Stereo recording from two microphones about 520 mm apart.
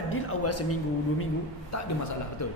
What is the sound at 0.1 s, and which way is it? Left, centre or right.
A man's voice, left.